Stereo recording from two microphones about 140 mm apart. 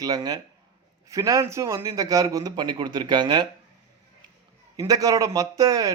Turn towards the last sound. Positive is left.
turn(degrees=-25)  # may be behind; listen again after turning